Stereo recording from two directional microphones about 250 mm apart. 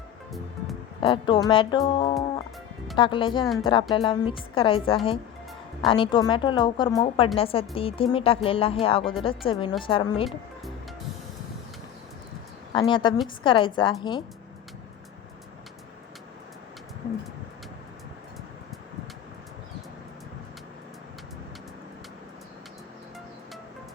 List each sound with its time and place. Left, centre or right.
1.0 s a woman's voice: left
12.7 s a woman's voice: centre